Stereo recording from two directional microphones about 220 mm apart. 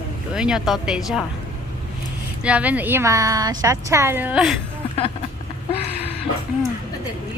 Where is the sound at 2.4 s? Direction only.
5° right (ahead or behind).